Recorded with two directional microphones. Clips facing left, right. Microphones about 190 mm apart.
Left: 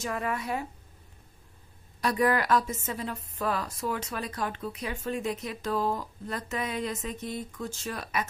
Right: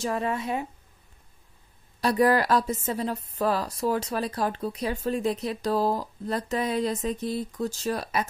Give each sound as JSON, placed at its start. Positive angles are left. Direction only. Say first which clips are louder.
{"t": 0.0, "sound": "a woman's voice", "louder": "right 4 dB", "side_deg": -30}
{"t": 2.0, "sound": "a woman's voice", "louder": "right 4 dB", "side_deg": -35}